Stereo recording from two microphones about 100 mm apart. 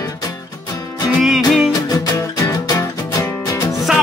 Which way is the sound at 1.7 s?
35° left (ahead or behind).